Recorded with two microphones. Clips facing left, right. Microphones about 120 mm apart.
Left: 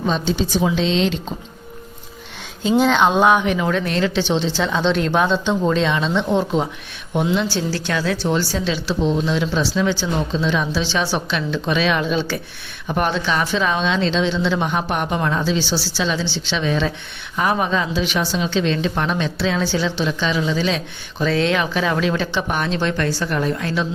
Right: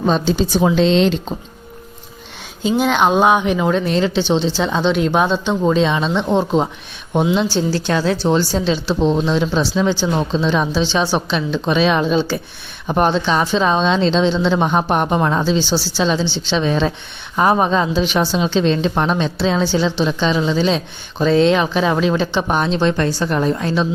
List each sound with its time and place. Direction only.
0.0 s a woman's voice: 40° right (ahead or behind)
2.7 s speech: 5° right (ahead or behind)
3.0 s a woman's voice: 15° right (ahead or behind)